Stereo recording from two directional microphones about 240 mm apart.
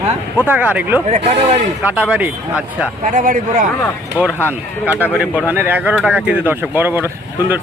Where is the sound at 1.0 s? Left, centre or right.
Right.